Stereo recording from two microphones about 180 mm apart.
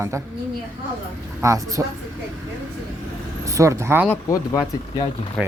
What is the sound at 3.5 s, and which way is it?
Speech, 15° right (ahead or behind).